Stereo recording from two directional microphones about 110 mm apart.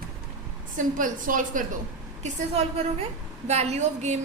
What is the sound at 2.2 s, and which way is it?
A woman's voice, 85° right.